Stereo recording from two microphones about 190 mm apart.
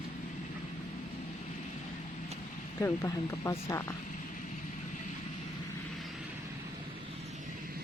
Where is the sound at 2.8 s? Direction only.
15° left (ahead or behind).